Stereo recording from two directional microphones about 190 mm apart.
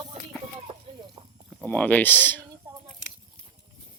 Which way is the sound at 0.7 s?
30° right (ahead or behind).